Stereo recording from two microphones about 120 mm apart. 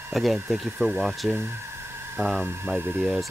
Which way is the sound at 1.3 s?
20° right (ahead or behind).